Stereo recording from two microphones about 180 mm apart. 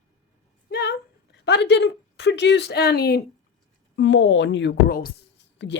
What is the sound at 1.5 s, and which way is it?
Speech, 70° left (ahead or behind).